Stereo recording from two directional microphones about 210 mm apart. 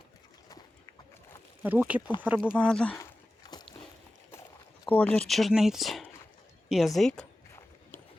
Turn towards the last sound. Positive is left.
turn(degrees=0)  # may be behind; listen again after turning